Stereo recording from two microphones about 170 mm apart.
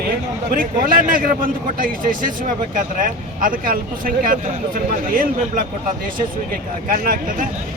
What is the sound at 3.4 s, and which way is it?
Speech, 55° right (ahead or behind).